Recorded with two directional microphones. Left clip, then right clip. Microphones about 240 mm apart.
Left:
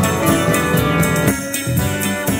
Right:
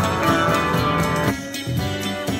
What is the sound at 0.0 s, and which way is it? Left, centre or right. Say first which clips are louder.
Music: left 2 dB; left.